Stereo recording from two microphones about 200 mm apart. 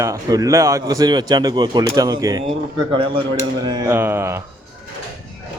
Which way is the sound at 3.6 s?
20° right (ahead or behind).